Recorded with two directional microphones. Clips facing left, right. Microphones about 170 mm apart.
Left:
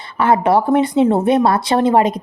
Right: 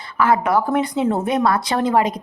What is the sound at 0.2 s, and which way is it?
Speech, 30° left (ahead or behind).